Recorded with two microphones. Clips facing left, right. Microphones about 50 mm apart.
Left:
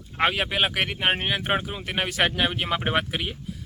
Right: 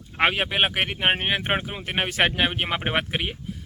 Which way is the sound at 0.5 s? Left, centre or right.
Right.